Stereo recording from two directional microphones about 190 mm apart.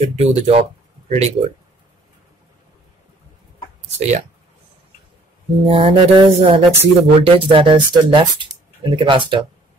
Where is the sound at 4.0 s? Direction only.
40° right (ahead or behind).